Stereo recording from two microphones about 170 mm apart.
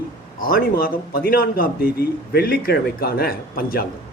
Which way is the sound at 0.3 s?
60° left (ahead or behind).